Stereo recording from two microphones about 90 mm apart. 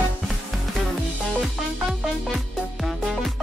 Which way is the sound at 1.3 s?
Centre (ahead or behind).